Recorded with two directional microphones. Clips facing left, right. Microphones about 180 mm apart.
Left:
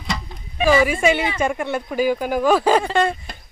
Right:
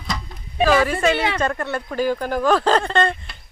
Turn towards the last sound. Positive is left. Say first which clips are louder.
# left 1 dB
turn(degrees=5)  # may be behind; listen again after turning